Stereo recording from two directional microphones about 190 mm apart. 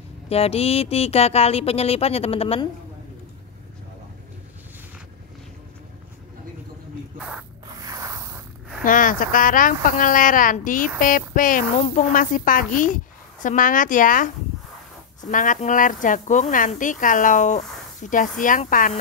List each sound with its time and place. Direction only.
0.3 s speech: 30° left (ahead or behind)
7.8 s zipper: 20° right (ahead or behind)
8.8 s speech: 45° left (ahead or behind)
15.3 s speech: 45° left (ahead or behind)